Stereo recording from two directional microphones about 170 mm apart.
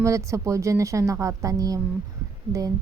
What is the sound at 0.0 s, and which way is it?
A woman's voice, 15° right (ahead or behind).